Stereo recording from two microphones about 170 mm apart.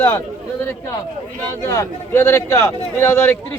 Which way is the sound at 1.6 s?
15° left (ahead or behind).